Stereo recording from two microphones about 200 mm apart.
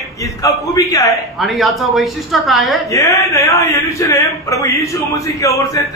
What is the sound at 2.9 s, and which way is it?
A man's voice, 15° left (ahead or behind).